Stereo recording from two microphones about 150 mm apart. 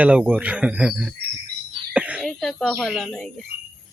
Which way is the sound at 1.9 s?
10° right (ahead or behind).